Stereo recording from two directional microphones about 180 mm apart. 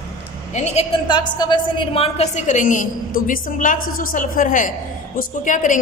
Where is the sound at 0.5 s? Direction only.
35° left (ahead or behind).